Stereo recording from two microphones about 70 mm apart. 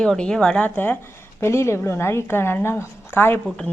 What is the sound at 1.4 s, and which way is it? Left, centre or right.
A woman's voice, left.